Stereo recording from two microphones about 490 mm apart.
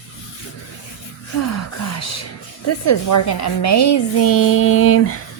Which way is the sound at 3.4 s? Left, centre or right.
Left.